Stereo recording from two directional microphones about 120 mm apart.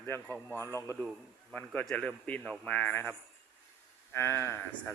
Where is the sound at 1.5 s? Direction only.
10° left (ahead or behind).